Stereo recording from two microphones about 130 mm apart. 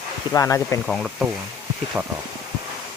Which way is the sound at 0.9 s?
Centre (ahead or behind).